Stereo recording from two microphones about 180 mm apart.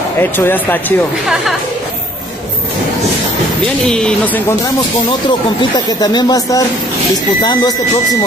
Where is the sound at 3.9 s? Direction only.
5° left (ahead or behind).